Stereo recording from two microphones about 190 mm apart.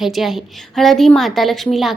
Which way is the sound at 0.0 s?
Centre (ahead or behind).